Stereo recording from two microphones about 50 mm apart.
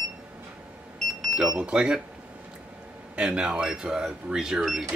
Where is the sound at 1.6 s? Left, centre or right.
Right.